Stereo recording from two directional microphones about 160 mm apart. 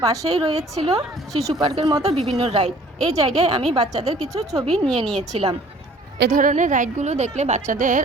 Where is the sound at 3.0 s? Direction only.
40° right (ahead or behind).